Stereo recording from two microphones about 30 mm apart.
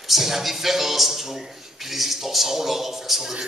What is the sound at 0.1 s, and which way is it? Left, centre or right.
A man's voice, centre.